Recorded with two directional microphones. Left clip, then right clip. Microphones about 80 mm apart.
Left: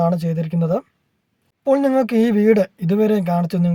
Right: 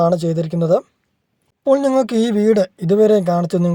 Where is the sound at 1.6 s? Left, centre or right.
Right.